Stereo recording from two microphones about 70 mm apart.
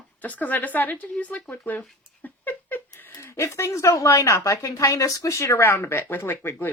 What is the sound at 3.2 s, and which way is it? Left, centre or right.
Speech, left.